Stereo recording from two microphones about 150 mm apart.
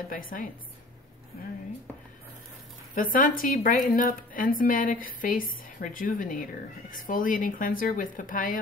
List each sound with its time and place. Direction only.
0.1 s a woman's voice: 65° left (ahead or behind)
2.9 s a woman's voice: 65° left (ahead or behind)